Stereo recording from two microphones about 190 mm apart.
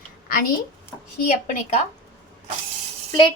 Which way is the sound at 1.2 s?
40° left (ahead or behind).